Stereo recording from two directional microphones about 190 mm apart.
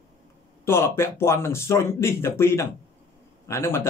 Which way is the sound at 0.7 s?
15° left (ahead or behind).